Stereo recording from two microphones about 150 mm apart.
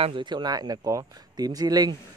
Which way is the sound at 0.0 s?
30° right (ahead or behind).